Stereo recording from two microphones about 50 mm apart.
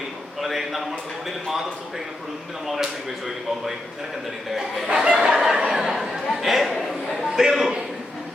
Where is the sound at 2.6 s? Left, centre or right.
Centre.